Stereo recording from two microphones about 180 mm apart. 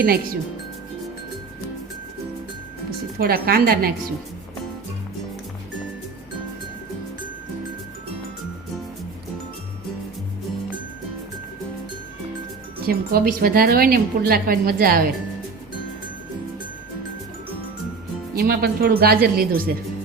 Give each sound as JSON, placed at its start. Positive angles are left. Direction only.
{"t": 3.2, "sound": "a woman's voice", "side_deg": -55}
{"t": 12.9, "sound": "a woman's voice", "side_deg": -55}
{"t": 18.3, "sound": "a woman's voice", "side_deg": -55}